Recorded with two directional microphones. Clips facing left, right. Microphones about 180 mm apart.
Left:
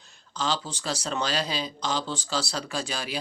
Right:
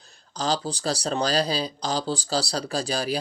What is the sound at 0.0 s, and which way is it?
Speech, 40° right (ahead or behind).